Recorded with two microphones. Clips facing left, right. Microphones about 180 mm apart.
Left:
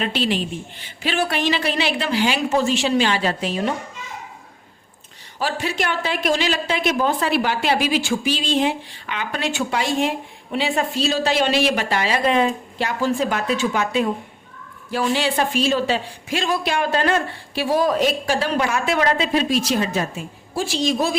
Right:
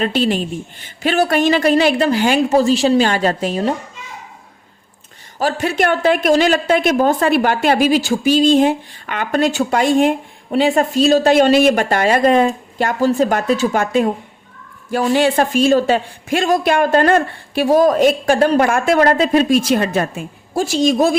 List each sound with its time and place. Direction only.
0.0 s speech: 45° right (ahead or behind)
5.4 s speech: 45° right (ahead or behind)